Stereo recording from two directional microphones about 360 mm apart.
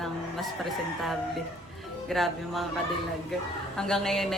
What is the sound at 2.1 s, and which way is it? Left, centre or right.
Speech, centre.